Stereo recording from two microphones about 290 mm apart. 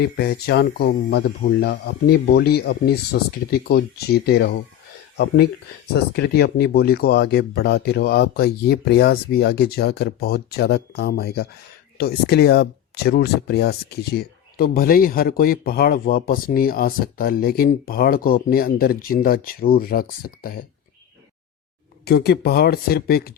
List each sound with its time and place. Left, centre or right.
0.0 s speech: left
22.0 s speech: left